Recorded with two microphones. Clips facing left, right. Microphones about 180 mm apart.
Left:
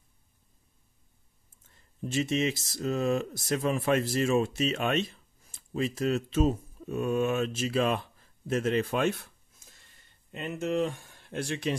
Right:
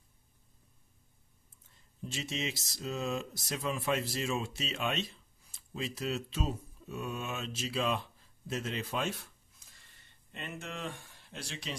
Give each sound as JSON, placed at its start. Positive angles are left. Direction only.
{"t": 2.0, "sound": "speech", "side_deg": 55}
{"t": 10.3, "sound": "speech", "side_deg": 45}